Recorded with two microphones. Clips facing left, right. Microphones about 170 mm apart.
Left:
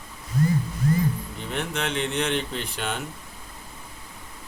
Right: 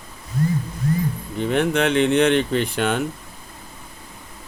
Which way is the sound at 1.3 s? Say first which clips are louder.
Right 10 dB; 65° right (ahead or behind).